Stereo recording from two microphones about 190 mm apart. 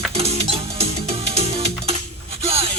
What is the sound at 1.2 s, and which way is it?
Music, 30° right (ahead or behind).